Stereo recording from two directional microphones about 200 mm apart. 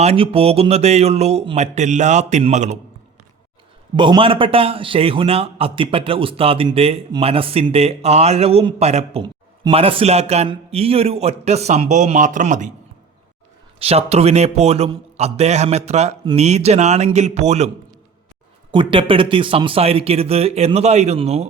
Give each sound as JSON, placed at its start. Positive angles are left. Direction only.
{"t": 0.0, "sound": "a man's voice", "side_deg": -30}
{"t": 3.9, "sound": "a man's voice", "side_deg": -25}
{"t": 13.7, "sound": "a man's voice", "side_deg": -30}
{"t": 18.7, "sound": "a man's voice", "side_deg": -25}